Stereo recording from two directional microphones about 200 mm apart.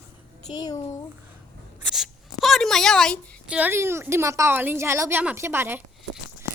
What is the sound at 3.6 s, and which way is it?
A woman's voice, 10° right (ahead or behind).